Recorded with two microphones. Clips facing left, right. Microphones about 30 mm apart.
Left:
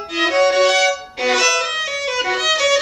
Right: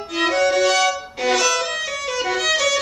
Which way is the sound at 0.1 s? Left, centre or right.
Left.